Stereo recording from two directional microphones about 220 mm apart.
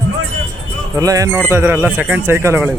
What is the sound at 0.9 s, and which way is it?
A man's voice, 15° right (ahead or behind).